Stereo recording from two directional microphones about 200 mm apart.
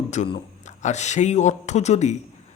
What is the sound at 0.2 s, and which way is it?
Speech, 35° left (ahead or behind).